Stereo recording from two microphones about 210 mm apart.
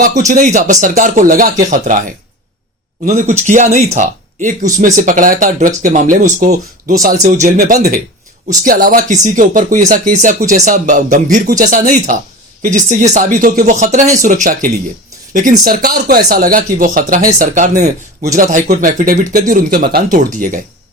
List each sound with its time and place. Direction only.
0.3 s speech: 35° right (ahead or behind)